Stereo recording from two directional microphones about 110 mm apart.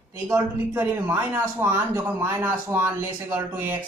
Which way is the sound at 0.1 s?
20° right (ahead or behind).